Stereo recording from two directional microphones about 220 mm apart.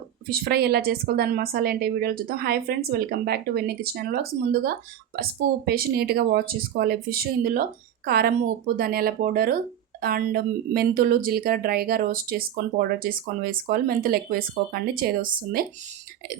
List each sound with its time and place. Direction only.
0.3 s a woman's voice: 45° right (ahead or behind)